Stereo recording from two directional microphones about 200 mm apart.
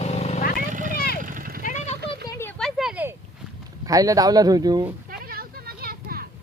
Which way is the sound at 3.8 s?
15° right (ahead or behind).